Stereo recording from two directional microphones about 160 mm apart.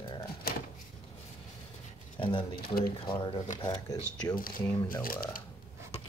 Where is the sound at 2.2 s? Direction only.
30° left (ahead or behind).